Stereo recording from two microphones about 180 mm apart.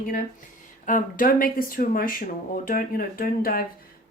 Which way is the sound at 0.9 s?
50° left (ahead or behind).